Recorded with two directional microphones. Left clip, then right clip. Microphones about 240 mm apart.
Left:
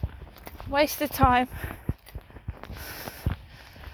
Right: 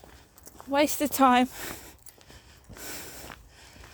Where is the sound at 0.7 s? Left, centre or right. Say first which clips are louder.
Left 1 dB; right.